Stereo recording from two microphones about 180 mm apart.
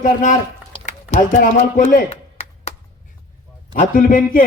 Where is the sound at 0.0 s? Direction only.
45° left (ahead or behind).